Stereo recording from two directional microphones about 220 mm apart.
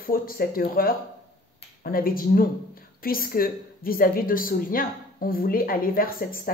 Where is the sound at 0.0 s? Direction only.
40° left (ahead or behind).